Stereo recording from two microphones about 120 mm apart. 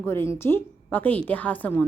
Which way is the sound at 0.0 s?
20° left (ahead or behind).